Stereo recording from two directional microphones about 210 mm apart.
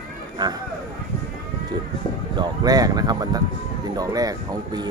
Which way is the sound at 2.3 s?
20° right (ahead or behind).